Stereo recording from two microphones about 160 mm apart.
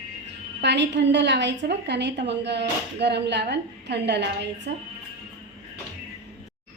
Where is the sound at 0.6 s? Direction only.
90° right.